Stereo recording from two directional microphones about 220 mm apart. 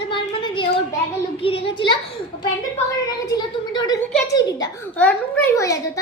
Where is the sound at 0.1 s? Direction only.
20° left (ahead or behind).